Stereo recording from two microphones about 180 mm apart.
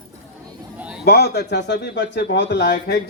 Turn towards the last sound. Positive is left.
turn(degrees=65)  # may be behind; listen again after turning